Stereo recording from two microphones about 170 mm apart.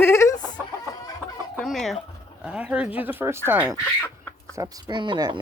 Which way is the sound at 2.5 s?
5° right (ahead or behind).